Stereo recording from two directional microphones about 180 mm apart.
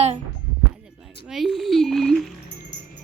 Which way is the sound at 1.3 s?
Centre (ahead or behind).